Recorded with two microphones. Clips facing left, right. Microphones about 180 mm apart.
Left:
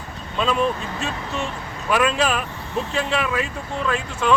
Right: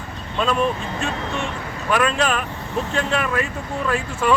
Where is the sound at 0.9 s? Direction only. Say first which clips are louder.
Right 2 dB; centre (ahead or behind).